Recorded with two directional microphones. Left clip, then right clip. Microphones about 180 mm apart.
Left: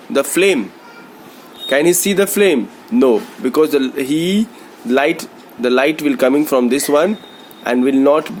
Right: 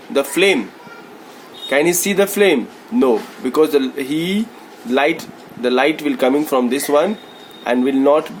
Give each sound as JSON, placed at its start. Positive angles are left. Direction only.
{"t": 0.1, "sound": "a man's voice", "side_deg": 35}
{"t": 1.7, "sound": "a man's voice", "side_deg": 35}